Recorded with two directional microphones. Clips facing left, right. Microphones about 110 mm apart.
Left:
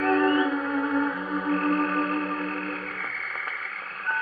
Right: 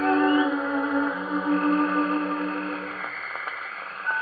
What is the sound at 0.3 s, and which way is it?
Music, 15° right (ahead or behind).